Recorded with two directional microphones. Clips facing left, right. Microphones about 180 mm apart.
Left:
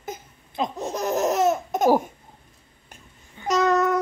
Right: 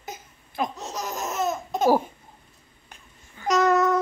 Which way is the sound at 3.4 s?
25° left (ahead or behind).